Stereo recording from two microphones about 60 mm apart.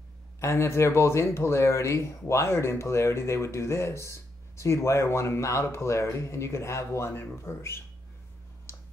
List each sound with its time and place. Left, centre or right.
0.4 s speech: left